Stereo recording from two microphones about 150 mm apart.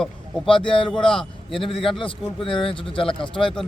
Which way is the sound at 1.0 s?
5° left (ahead or behind).